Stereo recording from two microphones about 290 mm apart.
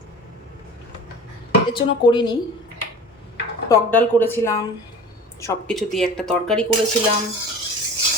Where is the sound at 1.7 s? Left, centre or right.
Centre.